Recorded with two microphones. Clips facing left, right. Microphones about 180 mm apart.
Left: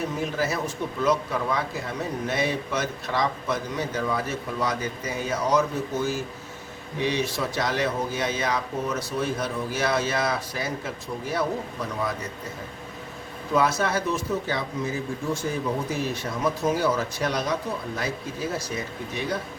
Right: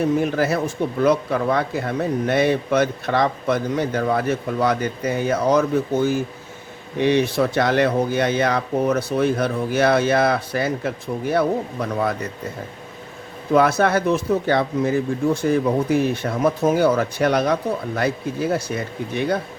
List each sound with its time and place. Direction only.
0.2 s speech: 60° right (ahead or behind)
7.0 s speech: 60° right (ahead or behind)
13.5 s speech: 60° right (ahead or behind)